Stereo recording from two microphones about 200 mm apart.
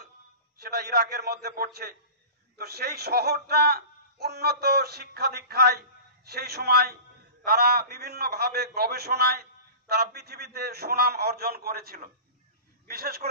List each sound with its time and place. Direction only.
0.6 s a man's voice: 50° right (ahead or behind)